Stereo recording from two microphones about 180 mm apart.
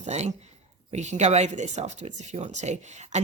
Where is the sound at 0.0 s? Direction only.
40° right (ahead or behind).